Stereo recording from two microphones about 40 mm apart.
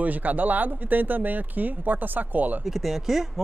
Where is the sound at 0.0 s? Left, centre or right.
Right.